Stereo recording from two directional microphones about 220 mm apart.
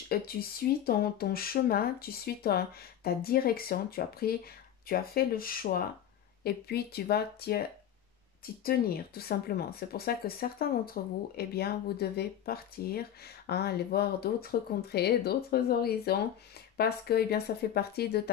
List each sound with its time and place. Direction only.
0.1 s speech: 45° left (ahead or behind)
8.6 s speech: 45° left (ahead or behind)